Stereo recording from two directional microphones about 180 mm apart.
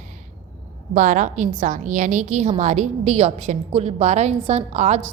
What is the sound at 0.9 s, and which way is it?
A woman's voice, 45° right (ahead or behind).